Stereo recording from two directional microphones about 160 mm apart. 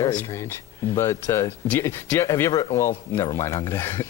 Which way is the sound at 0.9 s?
15° left (ahead or behind).